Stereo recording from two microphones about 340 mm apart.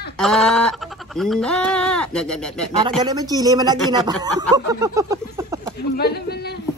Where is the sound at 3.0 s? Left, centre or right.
Centre.